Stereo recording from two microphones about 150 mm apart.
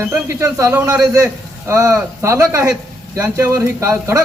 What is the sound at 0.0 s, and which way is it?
A man's voice, 20° right (ahead or behind).